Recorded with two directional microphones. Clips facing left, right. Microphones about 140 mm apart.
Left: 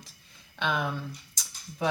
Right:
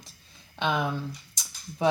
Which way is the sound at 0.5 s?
25° right (ahead or behind).